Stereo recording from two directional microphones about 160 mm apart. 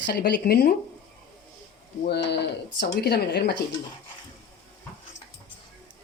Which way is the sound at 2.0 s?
90° left.